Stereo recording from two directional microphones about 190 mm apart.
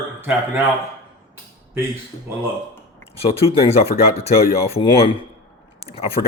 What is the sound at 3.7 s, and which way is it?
Speech, 30° left (ahead or behind).